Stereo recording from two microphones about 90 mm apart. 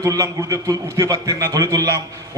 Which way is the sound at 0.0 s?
35° right (ahead or behind).